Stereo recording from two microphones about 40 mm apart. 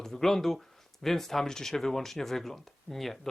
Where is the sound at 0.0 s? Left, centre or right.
Centre.